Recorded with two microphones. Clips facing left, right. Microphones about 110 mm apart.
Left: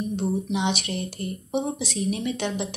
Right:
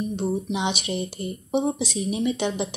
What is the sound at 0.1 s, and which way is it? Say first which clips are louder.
Speech: even; 15° right (ahead or behind).